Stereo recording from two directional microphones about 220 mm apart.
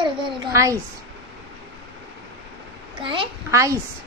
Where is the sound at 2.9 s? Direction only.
20° right (ahead or behind).